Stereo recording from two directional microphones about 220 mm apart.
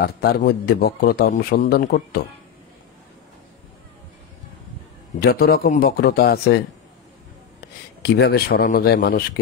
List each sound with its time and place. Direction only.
0.0 s a man's voice: 45° left (ahead or behind)
5.2 s a man's voice: 45° left (ahead or behind)
8.0 s a man's voice: 45° left (ahead or behind)